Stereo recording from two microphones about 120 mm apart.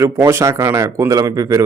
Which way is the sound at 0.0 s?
20° right (ahead or behind).